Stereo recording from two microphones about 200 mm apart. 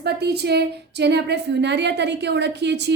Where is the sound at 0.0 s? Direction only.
55° right (ahead or behind).